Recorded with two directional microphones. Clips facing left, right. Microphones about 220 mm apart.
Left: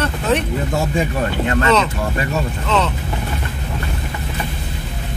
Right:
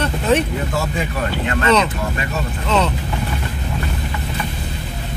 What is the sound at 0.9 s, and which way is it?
Speech, 35° left (ahead or behind).